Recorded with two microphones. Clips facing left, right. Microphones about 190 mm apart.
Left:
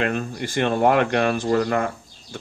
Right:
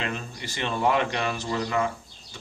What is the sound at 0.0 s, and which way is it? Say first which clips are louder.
Speech: left 8 dB; 55° left (ahead or behind).